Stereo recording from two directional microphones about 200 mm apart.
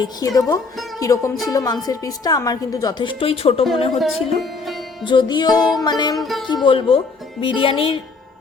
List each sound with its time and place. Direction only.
0.0 s speech: 20° left (ahead or behind)
0.9 s music: 15° left (ahead or behind)
1.5 s speech: 20° left (ahead or behind)
3.9 s speech: centre (ahead or behind)
5.0 s speech: 20° left (ahead or behind)
6.1 s speech: centre (ahead or behind)
6.7 s speech: 25° left (ahead or behind)